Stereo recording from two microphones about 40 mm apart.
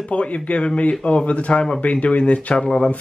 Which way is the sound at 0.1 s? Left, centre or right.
Left.